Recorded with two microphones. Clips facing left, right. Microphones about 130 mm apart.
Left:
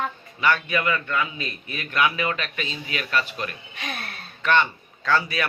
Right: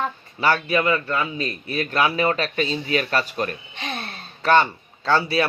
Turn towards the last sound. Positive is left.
turn(degrees=-30)  # may be behind; listen again after turning